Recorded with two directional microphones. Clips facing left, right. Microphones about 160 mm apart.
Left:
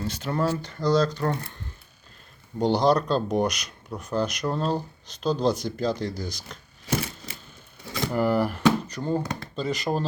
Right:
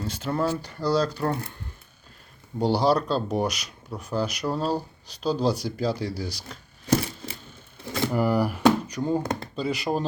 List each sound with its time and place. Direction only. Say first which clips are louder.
0.0 s speech: even; 5° right (ahead or behind)
2.6 s speech: left 1 dB; 5° right (ahead or behind)
8.0 s speech: even; 10° right (ahead or behind)